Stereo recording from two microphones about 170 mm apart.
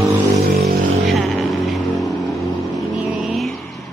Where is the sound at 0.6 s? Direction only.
Centre (ahead or behind).